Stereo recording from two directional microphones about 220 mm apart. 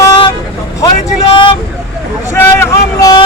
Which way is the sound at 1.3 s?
25° left (ahead or behind).